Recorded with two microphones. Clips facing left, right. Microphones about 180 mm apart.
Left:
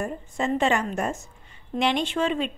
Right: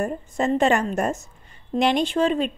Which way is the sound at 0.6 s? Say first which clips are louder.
Right 4 dB; 45° right (ahead or behind).